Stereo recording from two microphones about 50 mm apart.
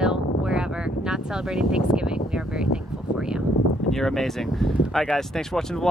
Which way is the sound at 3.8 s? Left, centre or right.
Centre.